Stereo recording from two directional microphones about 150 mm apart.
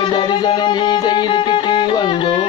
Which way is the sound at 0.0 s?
30° left (ahead or behind).